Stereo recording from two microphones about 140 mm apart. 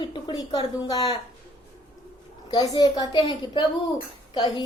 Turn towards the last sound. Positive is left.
turn(degrees=30)  # may be behind; listen again after turning